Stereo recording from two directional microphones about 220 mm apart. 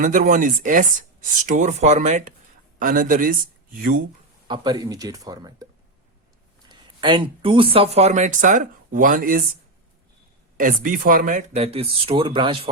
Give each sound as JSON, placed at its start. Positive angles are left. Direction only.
{"t": 0.0, "sound": "speech", "side_deg": -35}
{"t": 4.4, "sound": "speech", "side_deg": -20}
{"t": 6.7, "sound": "speech", "side_deg": -20}
{"t": 10.6, "sound": "speech", "side_deg": -40}